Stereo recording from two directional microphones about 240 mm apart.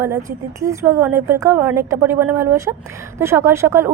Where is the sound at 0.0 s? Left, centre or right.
Centre.